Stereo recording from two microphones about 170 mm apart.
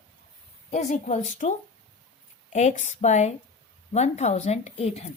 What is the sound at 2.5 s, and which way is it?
A woman's voice, 40° left (ahead or behind).